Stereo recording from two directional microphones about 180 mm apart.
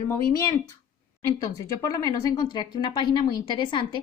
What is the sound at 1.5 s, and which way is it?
A woman's voice, 20° left (ahead or behind).